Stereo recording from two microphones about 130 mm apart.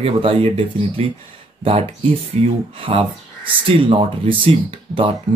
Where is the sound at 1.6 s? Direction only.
50° right (ahead or behind).